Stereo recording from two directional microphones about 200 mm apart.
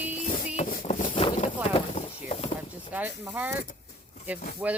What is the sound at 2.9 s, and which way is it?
Speech, 10° right (ahead or behind).